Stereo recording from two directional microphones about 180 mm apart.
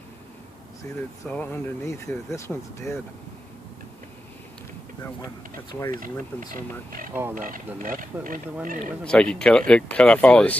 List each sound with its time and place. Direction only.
1.2 s speech: 10° left (ahead or behind)
5.9 s speech: 50° right (ahead or behind)
9.0 s speech: 5° left (ahead or behind)